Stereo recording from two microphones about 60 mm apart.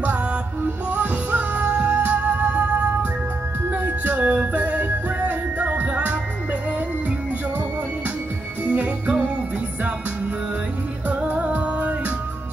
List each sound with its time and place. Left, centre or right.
0.8 s music: right
8.6 s music: right
11.1 s music: right